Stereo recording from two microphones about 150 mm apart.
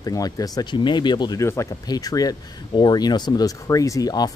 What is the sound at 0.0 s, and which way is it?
Speech, 25° left (ahead or behind).